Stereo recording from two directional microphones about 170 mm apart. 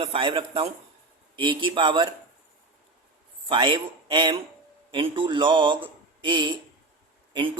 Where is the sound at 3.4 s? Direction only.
25° right (ahead or behind).